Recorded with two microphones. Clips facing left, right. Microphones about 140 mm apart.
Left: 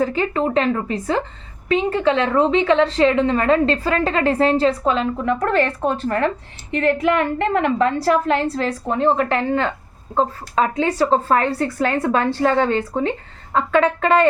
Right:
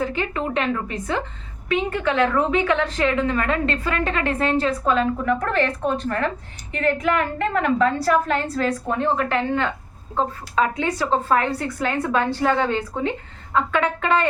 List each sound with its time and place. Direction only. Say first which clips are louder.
0.0 s a woman's voice: left 5 dB; 35° left (ahead or behind)